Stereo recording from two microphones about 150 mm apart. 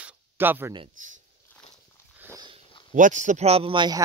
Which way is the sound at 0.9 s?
60° right (ahead or behind).